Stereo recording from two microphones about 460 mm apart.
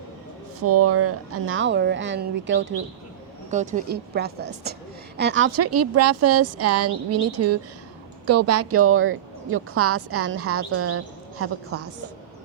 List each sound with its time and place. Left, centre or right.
0.6 s a woman's voice: right